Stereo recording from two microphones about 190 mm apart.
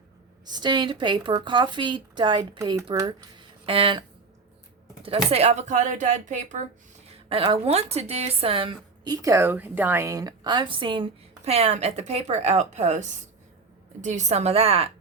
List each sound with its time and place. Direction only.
0.5 s a woman's voice: 25° right (ahead or behind)
5.0 s speech: 30° right (ahead or behind)
7.3 s a woman's voice: 30° right (ahead or behind)